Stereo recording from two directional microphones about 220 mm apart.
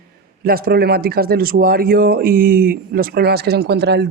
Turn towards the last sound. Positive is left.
turn(degrees=-50)  # may be behind; listen again after turning